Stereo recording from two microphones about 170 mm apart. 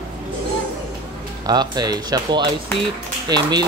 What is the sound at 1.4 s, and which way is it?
Speech, 25° right (ahead or behind).